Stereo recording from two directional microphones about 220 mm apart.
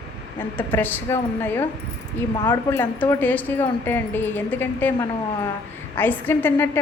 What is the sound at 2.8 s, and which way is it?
A woman's voice, 10° left (ahead or behind).